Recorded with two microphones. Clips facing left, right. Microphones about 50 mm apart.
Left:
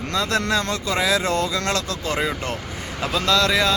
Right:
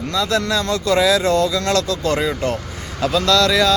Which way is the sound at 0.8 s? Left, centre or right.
Centre.